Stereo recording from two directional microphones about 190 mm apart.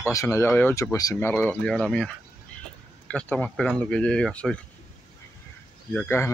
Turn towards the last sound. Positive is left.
turn(degrees=10)  # may be behind; listen again after turning